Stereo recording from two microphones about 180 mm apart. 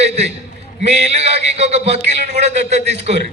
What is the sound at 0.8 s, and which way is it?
A man's voice, 35° right (ahead or behind).